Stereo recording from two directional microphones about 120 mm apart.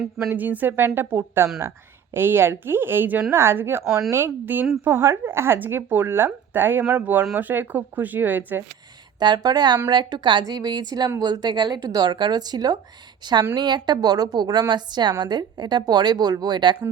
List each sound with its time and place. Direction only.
0.2 s speech: 20° right (ahead or behind)
9.1 s speech: 35° right (ahead or behind)